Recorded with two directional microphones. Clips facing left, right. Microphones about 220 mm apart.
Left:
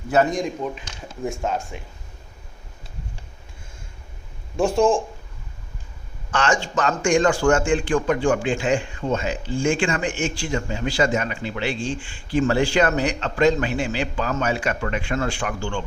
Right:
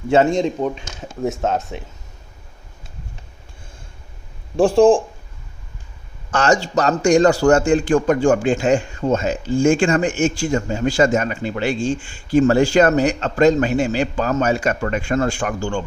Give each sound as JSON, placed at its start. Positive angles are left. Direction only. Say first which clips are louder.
{"t": 0.1, "sound": "speech", "louder": "right 5 dB", "side_deg": -25}
{"t": 4.5, "sound": "speech", "louder": "right 6 dB", "side_deg": -30}
{"t": 6.3, "sound": "a man's voice", "louder": "right 5 dB", "side_deg": -40}